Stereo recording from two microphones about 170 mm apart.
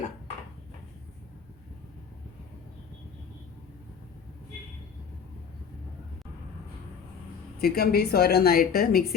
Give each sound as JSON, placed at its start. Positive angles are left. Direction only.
{"t": 7.6, "sound": "a woman's voice", "side_deg": 65}